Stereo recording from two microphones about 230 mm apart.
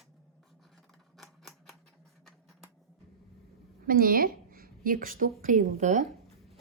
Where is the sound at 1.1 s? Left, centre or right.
Centre.